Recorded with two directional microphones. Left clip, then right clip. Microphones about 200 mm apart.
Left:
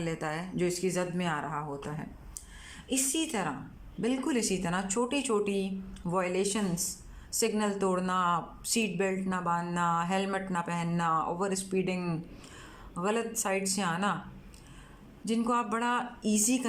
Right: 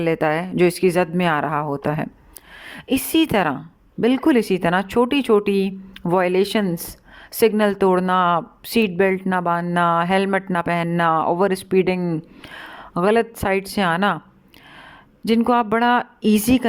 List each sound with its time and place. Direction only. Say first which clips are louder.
0.0 s a woman's voice: right 15 dB; 45° right (ahead or behind)
11.9 s speech: right 11 dB; 25° right (ahead or behind)
12.5 s speech: right 14 dB; 40° right (ahead or behind)
15.4 s speech: right 12 dB; 45° right (ahead or behind)